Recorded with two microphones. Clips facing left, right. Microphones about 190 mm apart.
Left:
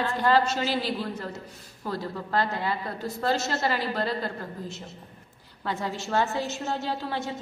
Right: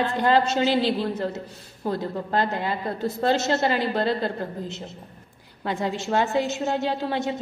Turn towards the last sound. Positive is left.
turn(degrees=-20)  # may be behind; listen again after turning